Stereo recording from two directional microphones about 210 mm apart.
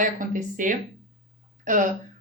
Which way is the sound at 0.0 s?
40° right (ahead or behind).